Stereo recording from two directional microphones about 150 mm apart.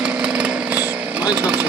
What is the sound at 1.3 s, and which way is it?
Speech, 10° right (ahead or behind).